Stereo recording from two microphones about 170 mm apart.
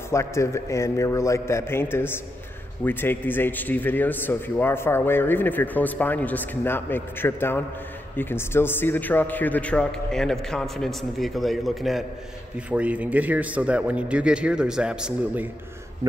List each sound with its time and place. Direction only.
0.1 s a man's voice: 15° left (ahead or behind); by 15.4 s 5° right (ahead or behind)
16.0 s a man's voice: 15° right (ahead or behind)